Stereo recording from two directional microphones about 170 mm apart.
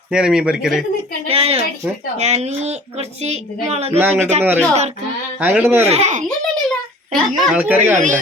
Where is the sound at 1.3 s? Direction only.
35° right (ahead or behind).